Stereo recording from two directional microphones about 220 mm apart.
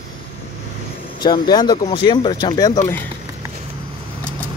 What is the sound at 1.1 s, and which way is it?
Speech, 20° left (ahead or behind).